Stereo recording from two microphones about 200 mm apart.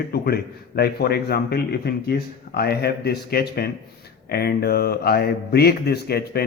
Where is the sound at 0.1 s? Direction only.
50° left (ahead or behind).